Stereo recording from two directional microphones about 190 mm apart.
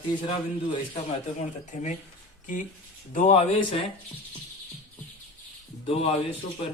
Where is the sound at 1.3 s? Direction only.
35° left (ahead or behind).